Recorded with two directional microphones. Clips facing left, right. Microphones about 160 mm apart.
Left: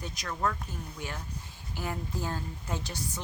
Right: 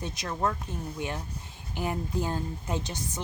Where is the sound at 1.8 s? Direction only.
20° right (ahead or behind).